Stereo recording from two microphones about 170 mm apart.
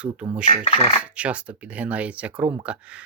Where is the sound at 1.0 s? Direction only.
5° right (ahead or behind).